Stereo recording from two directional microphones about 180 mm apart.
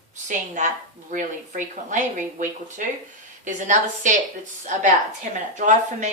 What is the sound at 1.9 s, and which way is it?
Speech, 45° right (ahead or behind).